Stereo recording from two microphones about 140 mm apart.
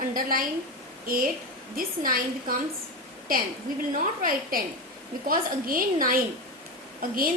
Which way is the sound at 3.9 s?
80° right.